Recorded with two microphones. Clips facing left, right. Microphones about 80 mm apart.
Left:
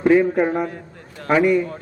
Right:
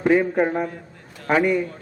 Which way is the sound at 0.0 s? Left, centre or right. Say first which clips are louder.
Left 3 dB; centre.